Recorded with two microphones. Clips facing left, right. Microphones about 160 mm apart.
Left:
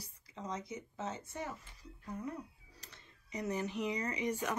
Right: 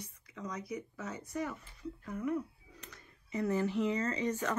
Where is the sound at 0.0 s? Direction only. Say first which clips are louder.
Right 2 dB; 25° left (ahead or behind).